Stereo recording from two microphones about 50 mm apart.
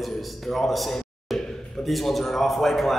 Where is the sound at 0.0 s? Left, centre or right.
Centre.